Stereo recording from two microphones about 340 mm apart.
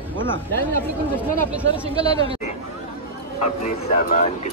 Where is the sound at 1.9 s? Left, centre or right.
Centre.